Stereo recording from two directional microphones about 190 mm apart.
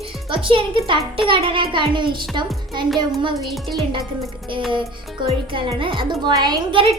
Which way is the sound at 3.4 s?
Centre (ahead or behind).